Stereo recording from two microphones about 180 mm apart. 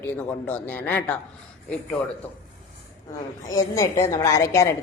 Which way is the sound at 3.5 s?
15° left (ahead or behind).